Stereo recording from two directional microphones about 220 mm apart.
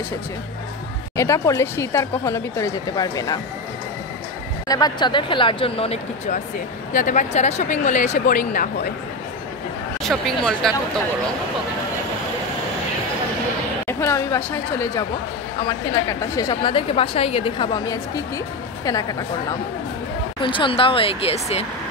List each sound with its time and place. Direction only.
1.1 s speech: 15° left (ahead or behind)
4.6 s a woman's voice: 15° left (ahead or behind); by 8.9 s 40° left (ahead or behind)
10.0 s speech: centre (ahead or behind)
13.8 s a woman's voice: 10° left (ahead or behind)
20.4 s a woman's voice: 20° left (ahead or behind)